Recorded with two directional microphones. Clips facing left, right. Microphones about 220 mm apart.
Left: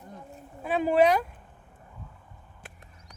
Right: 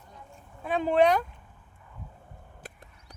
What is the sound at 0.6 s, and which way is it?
Speech, 5° left (ahead or behind).